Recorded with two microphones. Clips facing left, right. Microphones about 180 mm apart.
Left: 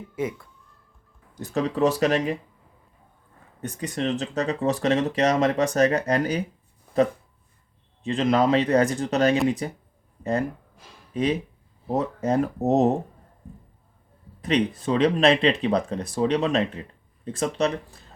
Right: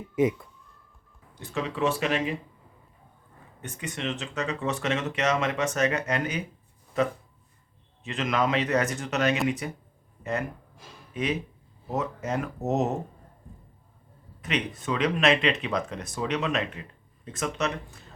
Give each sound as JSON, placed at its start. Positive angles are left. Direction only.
{"t": 0.2, "sound": "speech", "side_deg": -20}
{"t": 1.4, "sound": "speech", "side_deg": 40}
{"t": 3.6, "sound": "speech", "side_deg": 35}
{"t": 8.0, "sound": "speech", "side_deg": 30}
{"t": 11.1, "sound": "speech", "side_deg": 35}
{"t": 14.4, "sound": "speech", "side_deg": 35}